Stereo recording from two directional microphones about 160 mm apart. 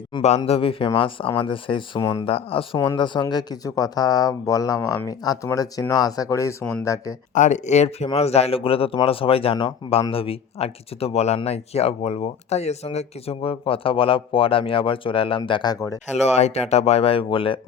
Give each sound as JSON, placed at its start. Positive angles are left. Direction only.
{"t": 0.2, "sound": "speech", "side_deg": 45}
{"t": 2.0, "sound": "speech", "side_deg": 20}
{"t": 2.2, "sound": "speech", "side_deg": 35}
{"t": 2.7, "sound": "speech", "side_deg": 20}
{"t": 3.0, "sound": "speech", "side_deg": 30}
{"t": 7.3, "sound": "speech", "side_deg": 50}
{"t": 16.1, "sound": "speech", "side_deg": 45}